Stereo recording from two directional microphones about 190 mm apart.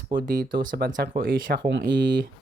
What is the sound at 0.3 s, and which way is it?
Speech, 45° right (ahead or behind).